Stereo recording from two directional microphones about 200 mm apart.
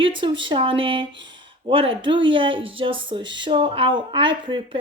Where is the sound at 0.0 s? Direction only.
25° right (ahead or behind).